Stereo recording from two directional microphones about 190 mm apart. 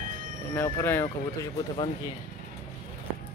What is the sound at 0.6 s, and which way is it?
Speech, 15° left (ahead or behind).